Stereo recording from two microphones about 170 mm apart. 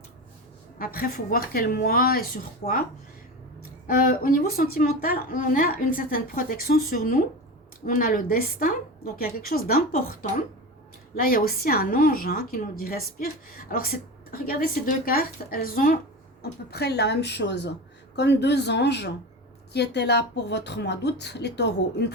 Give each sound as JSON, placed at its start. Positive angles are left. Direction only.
{"t": 0.8, "sound": "a woman's voice", "side_deg": 60}
{"t": 3.8, "sound": "a woman's voice", "side_deg": 55}
{"t": 11.2, "sound": "a woman's voice", "side_deg": 55}
{"t": 16.4, "sound": "speech", "side_deg": 70}